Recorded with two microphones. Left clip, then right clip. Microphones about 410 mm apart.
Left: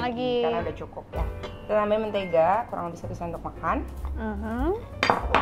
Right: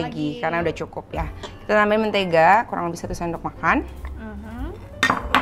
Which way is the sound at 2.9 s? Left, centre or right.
Right.